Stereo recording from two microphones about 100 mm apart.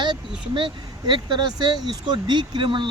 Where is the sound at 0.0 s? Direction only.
50° right (ahead or behind).